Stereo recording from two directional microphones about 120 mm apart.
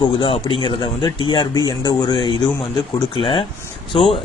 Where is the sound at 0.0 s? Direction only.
45° left (ahead or behind).